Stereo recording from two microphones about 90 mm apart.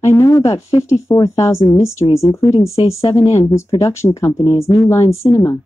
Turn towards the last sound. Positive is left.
turn(degrees=30)  # may be behind; listen again after turning